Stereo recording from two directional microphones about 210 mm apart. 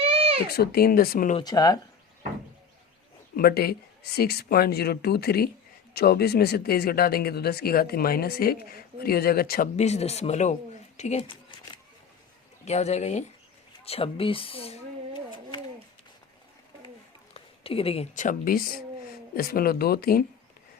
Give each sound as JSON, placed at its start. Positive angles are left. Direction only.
{"t": 0.0, "sound": "a sound", "side_deg": -25}
{"t": 0.5, "sound": "speech", "side_deg": 50}
{"t": 1.4, "sound": "speech", "side_deg": 20}
{"t": 3.3, "sound": "speech", "side_deg": 45}
{"t": 9.7, "sound": "speech", "side_deg": 30}
{"t": 13.8, "sound": "a sound", "side_deg": 25}
{"t": 17.3, "sound": "speech", "side_deg": 25}